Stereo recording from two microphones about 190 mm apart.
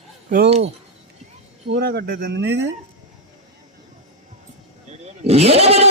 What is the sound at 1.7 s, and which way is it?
Speech, 65° right (ahead or behind).